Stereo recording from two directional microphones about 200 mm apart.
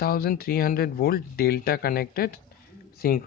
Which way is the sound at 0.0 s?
50° left (ahead or behind).